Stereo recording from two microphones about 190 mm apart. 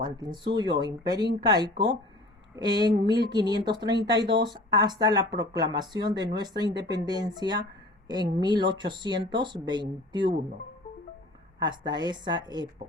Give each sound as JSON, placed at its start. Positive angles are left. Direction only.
{"t": 0.0, "sound": "speech", "side_deg": -25}
{"t": 11.6, "sound": "speech", "side_deg": -25}